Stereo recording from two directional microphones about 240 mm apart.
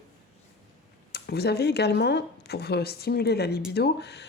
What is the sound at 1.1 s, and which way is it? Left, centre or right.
Speech, left.